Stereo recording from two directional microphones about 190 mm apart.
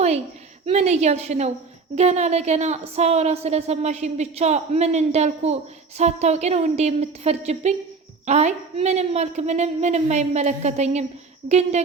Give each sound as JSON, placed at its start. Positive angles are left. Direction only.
{"t": 0.6, "sound": "a woman's voice", "side_deg": -35}